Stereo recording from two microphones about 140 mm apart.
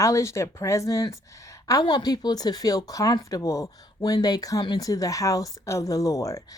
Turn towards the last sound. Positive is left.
turn(degrees=20)  # may be behind; listen again after turning